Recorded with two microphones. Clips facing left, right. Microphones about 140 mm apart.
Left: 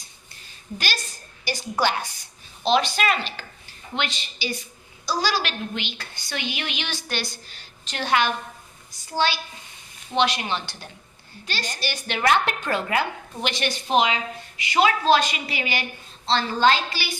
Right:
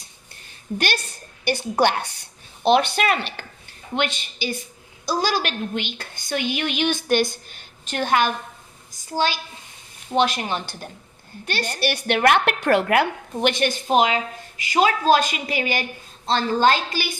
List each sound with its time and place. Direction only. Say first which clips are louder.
1.5 s a woman's voice: right 4 dB; 60° right (ahead or behind)
11.4 s a woman's voice: right 6 dB; 60° right (ahead or behind)